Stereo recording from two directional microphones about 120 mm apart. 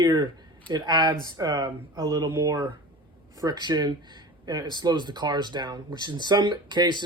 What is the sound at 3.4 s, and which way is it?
Speech, 35° right (ahead or behind).